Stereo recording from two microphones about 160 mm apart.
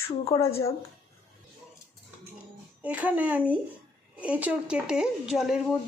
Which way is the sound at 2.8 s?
10° right (ahead or behind).